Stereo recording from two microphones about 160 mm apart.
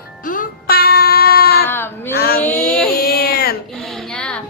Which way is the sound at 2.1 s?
75° left (ahead or behind).